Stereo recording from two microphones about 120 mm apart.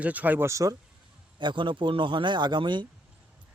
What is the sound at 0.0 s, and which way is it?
Speech, 15° right (ahead or behind).